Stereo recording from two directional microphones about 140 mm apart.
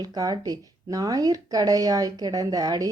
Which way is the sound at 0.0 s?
25° right (ahead or behind).